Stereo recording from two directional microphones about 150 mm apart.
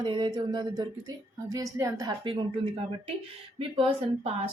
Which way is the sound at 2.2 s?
35° right (ahead or behind).